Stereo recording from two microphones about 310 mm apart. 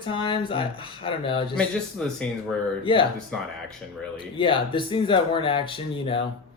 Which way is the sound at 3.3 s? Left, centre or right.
Centre.